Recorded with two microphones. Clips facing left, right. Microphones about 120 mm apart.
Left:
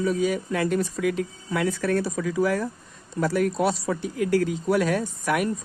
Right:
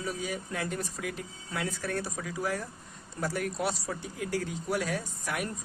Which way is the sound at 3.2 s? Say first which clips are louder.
Left 9 dB; 90° left.